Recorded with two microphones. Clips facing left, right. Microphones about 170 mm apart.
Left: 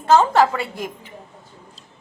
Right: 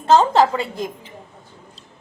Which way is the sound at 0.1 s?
25° right (ahead or behind).